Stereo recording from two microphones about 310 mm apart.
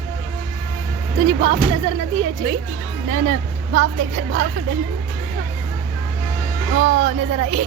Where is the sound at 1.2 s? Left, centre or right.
Centre.